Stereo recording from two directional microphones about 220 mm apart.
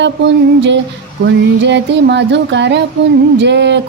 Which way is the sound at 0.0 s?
55° right (ahead or behind).